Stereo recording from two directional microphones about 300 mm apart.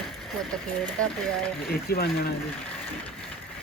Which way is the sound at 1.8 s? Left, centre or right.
Left.